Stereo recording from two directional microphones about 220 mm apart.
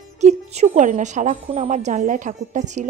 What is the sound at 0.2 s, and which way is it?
A woman's voice, 30° right (ahead or behind).